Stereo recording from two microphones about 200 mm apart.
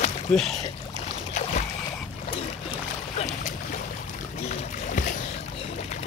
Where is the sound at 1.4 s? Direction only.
35° left (ahead or behind).